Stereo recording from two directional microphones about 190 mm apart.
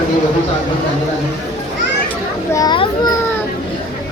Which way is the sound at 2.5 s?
25° left (ahead or behind).